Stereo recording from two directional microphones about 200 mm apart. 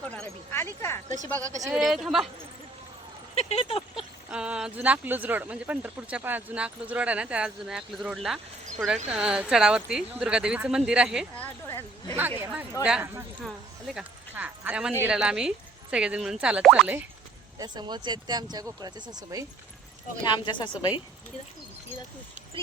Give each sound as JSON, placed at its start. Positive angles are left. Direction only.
{"t": 0.1, "sound": "speech", "side_deg": 10}
{"t": 1.4, "sound": "speech", "side_deg": -15}
{"t": 1.7, "sound": "speech", "side_deg": 0}
{"t": 3.3, "sound": "a woman's voice", "side_deg": 30}
{"t": 4.3, "sound": "speech", "side_deg": -5}
{"t": 11.3, "sound": "speech", "side_deg": 15}
{"t": 12.1, "sound": "speech", "side_deg": -10}
{"t": 17.6, "sound": "speech", "side_deg": -20}
{"t": 20.2, "sound": "a woman's voice", "side_deg": 25}